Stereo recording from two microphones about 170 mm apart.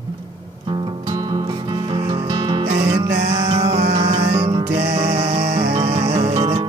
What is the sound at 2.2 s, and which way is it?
Music, 25° right (ahead or behind).